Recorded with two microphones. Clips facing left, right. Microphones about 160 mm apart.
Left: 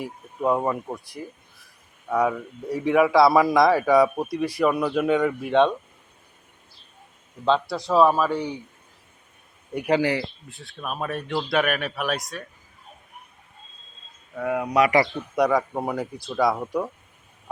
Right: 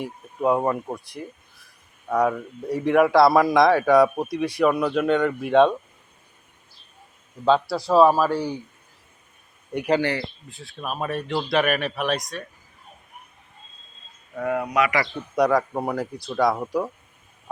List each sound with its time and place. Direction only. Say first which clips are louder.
0.0 s speech: right 2 dB; 5° right (ahead or behind)
7.4 s speech: right 2 dB; 5° right (ahead or behind)
9.7 s speech: even; 5° left (ahead or behind)
10.5 s speech: right 3 dB; centre (ahead or behind)
14.3 s speech: right 1 dB; 5° left (ahead or behind)
14.7 s speech: left 5 dB; 35° left (ahead or behind)
15.4 s speech: right 1 dB; centre (ahead or behind)